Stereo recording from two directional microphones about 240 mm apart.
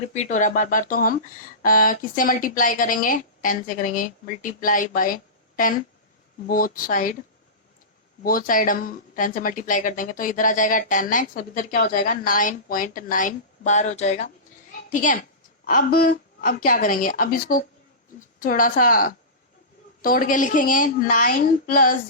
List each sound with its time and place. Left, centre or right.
0.1 s speech: left
8.2 s a woman's voice: left